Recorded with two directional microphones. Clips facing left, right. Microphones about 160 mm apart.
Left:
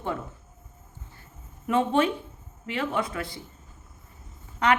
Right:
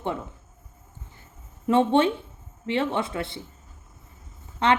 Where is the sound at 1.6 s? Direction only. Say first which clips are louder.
Right 3 dB; 30° right (ahead or behind).